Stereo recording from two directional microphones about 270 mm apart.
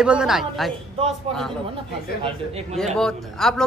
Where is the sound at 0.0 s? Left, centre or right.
Centre.